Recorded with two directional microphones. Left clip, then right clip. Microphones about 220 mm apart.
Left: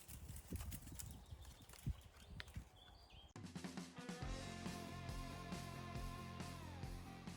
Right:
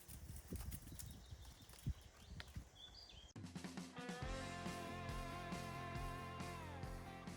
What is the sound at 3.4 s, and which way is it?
Music, centre (ahead or behind).